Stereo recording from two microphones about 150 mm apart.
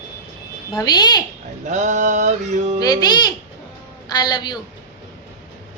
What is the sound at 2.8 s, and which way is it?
A man's voice, 25° left (ahead or behind).